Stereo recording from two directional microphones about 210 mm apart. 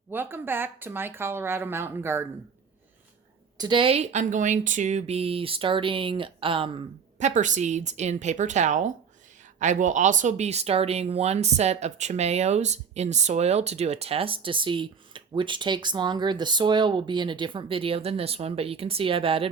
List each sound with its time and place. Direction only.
0.1 s speech: 10° right (ahead or behind)
3.6 s speech: 25° right (ahead or behind)